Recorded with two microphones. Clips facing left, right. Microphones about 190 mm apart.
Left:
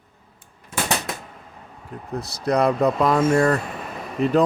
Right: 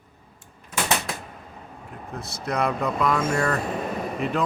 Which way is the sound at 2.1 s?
35° left (ahead or behind).